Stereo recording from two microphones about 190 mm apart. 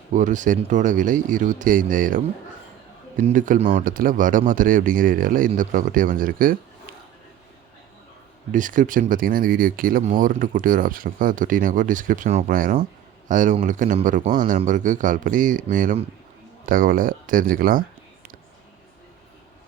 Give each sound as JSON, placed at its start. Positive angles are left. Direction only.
{"t": 0.1, "sound": "speech", "side_deg": -40}
{"t": 8.5, "sound": "speech", "side_deg": -45}